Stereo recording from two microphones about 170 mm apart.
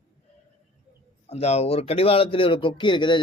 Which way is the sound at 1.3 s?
40° left (ahead or behind).